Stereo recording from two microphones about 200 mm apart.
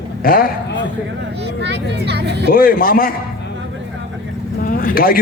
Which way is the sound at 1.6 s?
60° right (ahead or behind).